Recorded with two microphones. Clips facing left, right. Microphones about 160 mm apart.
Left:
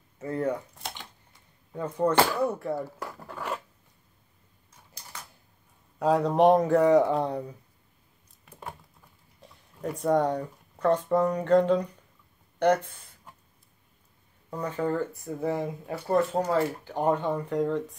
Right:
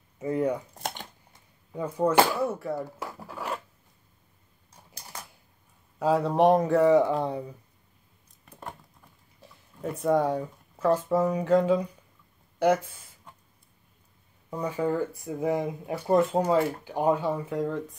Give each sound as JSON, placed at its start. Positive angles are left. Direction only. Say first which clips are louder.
{"t": 0.2, "sound": "a sound", "louder": "right 2 dB", "side_deg": -15}
{"t": 0.7, "sound": "computer keyboard", "louder": "right 5 dB", "side_deg": -50}
{"t": 1.7, "sound": "speech", "louder": "even", "side_deg": -10}
{"t": 2.4, "sound": "zipper", "louder": "left 1 dB", "side_deg": 0}
{"t": 5.9, "sound": "speech", "louder": "left 1 dB", "side_deg": 0}
{"t": 8.5, "sound": "a sound", "louder": "even", "side_deg": 5}
{"t": 9.4, "sound": "speech", "louder": "even", "side_deg": 0}
{"t": 14.5, "sound": "speech", "louder": "right 1 dB", "side_deg": -10}